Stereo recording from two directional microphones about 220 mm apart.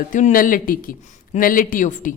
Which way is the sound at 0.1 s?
35° left (ahead or behind).